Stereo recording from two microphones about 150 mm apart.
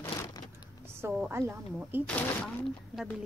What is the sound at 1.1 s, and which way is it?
Speech, 15° right (ahead or behind).